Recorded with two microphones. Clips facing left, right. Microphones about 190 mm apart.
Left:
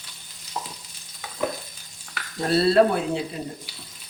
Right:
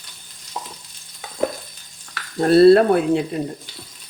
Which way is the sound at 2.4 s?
55° right (ahead or behind).